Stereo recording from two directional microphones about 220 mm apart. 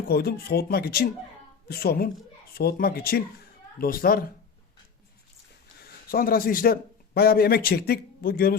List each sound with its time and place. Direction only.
0.1 s a woman's voice: 45° left (ahead or behind)
5.8 s speech: 40° left (ahead or behind)